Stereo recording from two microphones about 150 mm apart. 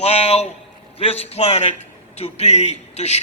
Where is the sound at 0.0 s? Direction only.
40° left (ahead or behind).